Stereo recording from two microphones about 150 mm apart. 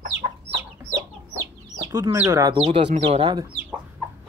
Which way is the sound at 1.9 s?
25° right (ahead or behind).